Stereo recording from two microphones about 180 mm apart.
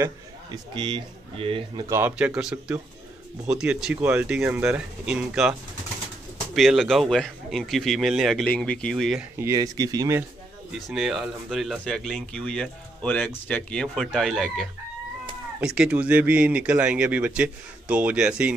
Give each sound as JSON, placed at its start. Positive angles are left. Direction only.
{"t": 0.0, "sound": "a man's voice", "side_deg": -25}
{"t": 1.9, "sound": "a man's voice", "side_deg": -15}
{"t": 9.4, "sound": "speech", "side_deg": -20}
{"t": 10.7, "sound": "a man's voice", "side_deg": 0}